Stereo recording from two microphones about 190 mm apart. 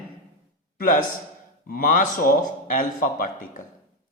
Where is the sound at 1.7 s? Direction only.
45° left (ahead or behind).